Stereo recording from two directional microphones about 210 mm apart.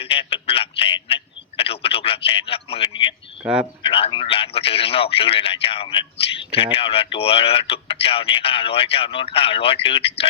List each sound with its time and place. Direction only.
0.0 s a sound: 25° left (ahead or behind)
3.4 s speech: 5° right (ahead or behind)
3.8 s a man's voice: 25° left (ahead or behind)